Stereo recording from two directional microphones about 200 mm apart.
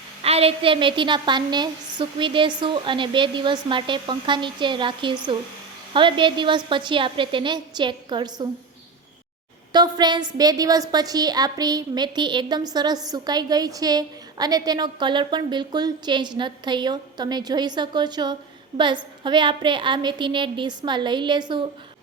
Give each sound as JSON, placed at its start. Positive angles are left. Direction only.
{"t": 0.2, "sound": "a woman's voice", "side_deg": -30}
{"t": 9.7, "sound": "a woman's voice", "side_deg": -20}